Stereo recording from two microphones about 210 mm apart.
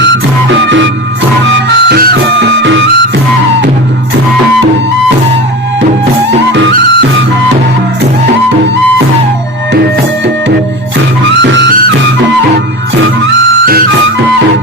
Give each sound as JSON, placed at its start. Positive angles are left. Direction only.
{"t": 1.5, "sound": "music", "side_deg": -50}